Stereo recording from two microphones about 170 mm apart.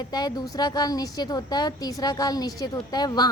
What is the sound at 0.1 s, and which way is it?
A woman's voice, 25° left (ahead or behind).